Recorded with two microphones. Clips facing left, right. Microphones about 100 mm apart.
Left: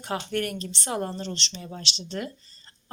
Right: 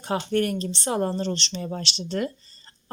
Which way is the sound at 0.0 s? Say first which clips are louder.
Right 5 dB; 30° right (ahead or behind).